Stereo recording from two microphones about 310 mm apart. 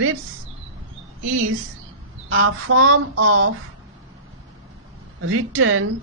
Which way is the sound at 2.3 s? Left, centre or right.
Right.